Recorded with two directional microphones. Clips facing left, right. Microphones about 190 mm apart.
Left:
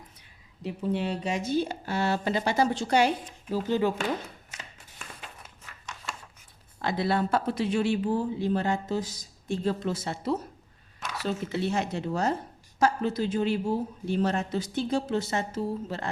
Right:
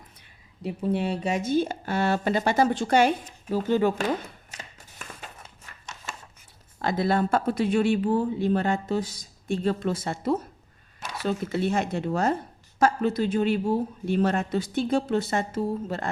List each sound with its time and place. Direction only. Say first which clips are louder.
0.6 s speech: right 3 dB; 55° right (ahead or behind)
6.7 s a man's voice: right 3 dB; 45° right (ahead or behind)